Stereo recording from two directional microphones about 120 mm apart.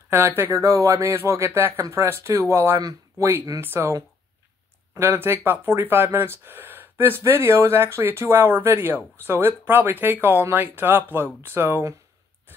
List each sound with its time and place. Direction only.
0.1 s speech: 20° right (ahead or behind)